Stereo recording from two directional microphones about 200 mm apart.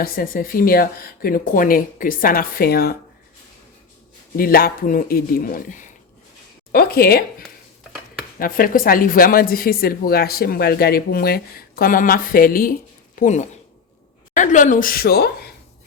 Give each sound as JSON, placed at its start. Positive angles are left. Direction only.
{"t": 0.0, "sound": "speech", "side_deg": 45}
{"t": 4.4, "sound": "speech", "side_deg": 45}